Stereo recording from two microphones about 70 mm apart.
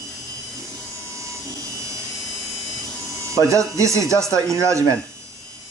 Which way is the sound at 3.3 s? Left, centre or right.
Right.